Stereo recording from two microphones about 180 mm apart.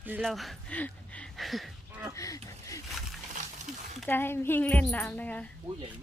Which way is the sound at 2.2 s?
20° left (ahead or behind).